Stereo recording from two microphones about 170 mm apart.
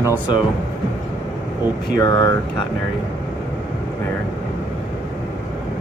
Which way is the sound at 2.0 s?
25° left (ahead or behind).